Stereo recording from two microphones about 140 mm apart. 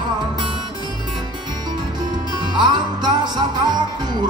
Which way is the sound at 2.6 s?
30° right (ahead or behind).